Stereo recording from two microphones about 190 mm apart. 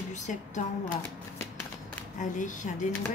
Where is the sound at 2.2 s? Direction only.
40° left (ahead or behind).